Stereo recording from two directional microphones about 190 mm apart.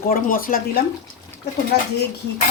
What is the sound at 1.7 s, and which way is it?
Speech, 60° left (ahead or behind).